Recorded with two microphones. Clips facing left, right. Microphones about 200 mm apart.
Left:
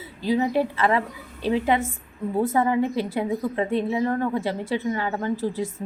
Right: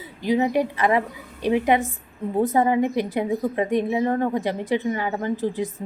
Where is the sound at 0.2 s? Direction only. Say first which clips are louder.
Right 1 dB; 20° right (ahead or behind).